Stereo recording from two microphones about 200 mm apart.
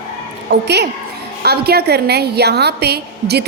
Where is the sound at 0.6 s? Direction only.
55° right (ahead or behind).